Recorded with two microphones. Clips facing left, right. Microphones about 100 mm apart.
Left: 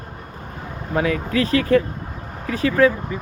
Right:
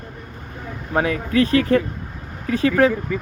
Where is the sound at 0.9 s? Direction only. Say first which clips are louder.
Right 1 dB; 35° right (ahead or behind).